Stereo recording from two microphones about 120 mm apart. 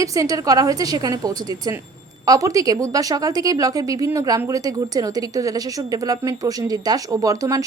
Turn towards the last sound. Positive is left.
turn(degrees=-30)  # may be behind; listen again after turning